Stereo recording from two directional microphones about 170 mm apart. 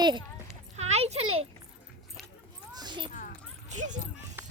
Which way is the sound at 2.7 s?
25° right (ahead or behind).